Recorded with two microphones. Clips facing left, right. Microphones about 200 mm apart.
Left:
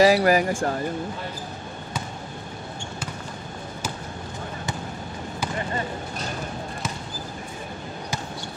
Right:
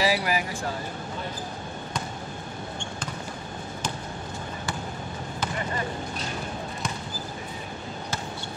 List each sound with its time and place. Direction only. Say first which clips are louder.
0.0 s speech: left 8 dB; 45° left (ahead or behind)